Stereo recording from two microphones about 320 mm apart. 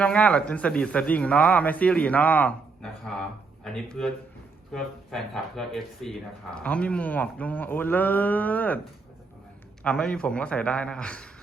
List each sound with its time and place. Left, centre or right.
0.0 s speech: centre
9.8 s speech: centre